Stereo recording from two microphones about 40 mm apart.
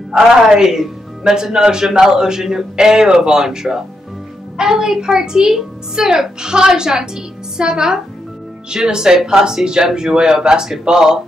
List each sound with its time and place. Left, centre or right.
0.1 s speech: centre